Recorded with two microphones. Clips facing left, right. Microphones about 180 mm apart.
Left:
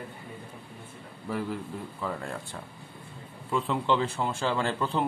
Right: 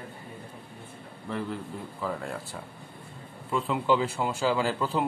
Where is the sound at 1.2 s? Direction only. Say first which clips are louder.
Left 1 dB; 5° left (ahead or behind).